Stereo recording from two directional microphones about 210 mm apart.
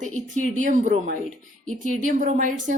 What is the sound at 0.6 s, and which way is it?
Speech, 35° right (ahead or behind).